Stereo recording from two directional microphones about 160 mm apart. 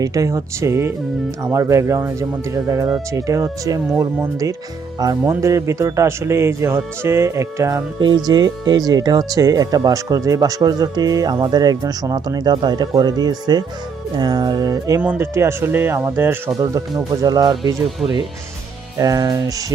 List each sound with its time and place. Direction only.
0.0 s a man's voice: 20° right (ahead or behind)
18.9 s speech: 20° right (ahead or behind)